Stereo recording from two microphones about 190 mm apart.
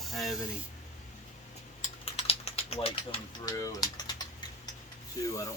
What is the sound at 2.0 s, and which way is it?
Typing, 30° left (ahead or behind).